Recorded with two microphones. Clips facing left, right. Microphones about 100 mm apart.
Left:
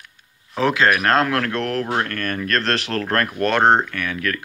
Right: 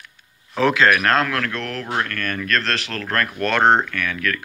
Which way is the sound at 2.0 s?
35° left (ahead or behind).